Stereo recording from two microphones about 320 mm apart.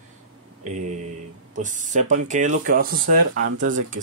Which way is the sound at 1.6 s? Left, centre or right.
Right.